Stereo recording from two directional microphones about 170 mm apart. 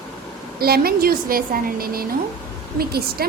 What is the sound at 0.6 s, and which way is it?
A woman's voice, 65° right (ahead or behind).